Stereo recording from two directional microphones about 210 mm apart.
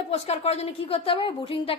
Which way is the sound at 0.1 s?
30° left (ahead or behind).